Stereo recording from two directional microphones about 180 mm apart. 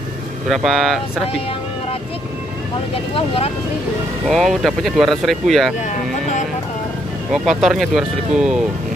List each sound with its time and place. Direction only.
0.5 s speech: centre (ahead or behind)
2.9 s speech: 35° left (ahead or behind)
4.3 s speech: centre (ahead or behind)
5.9 s music: 45° left (ahead or behind)
7.3 s speech: centre (ahead or behind)